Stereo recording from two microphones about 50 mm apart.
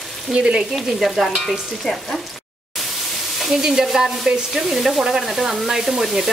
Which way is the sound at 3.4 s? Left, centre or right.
Centre.